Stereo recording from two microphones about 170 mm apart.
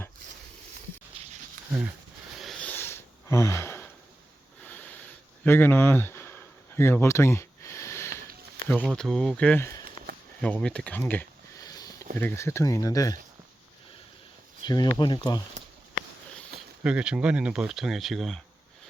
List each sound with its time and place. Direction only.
2.4 s a sound: 5° left (ahead or behind)
8.8 s speech: centre (ahead or behind)
11.6 s sniff: 20° left (ahead or behind)
12.1 s speech: 15° left (ahead or behind)
14.6 s speech: 25° left (ahead or behind)
16.8 s speech: 5° right (ahead or behind)